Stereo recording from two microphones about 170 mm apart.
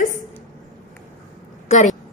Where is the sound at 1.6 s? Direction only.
45° left (ahead or behind).